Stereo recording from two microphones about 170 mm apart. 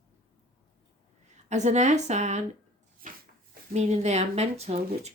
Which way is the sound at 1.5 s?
45° right (ahead or behind).